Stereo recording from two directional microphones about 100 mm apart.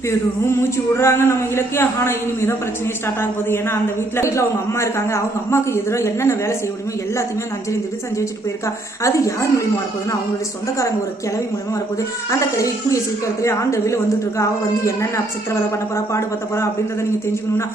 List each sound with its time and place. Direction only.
0.4 s a man's voice: 25° left (ahead or behind)
8.2 s a woman's voice: 30° left (ahead or behind)
12.3 s a woman's voice: 30° left (ahead or behind)